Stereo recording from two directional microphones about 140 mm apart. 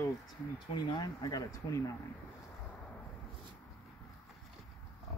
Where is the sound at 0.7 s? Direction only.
30° left (ahead or behind).